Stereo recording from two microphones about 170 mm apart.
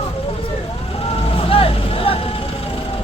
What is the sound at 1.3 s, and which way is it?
Vehicle, 35° left (ahead or behind).